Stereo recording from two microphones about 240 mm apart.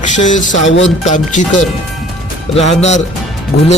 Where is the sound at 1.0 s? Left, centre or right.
Left.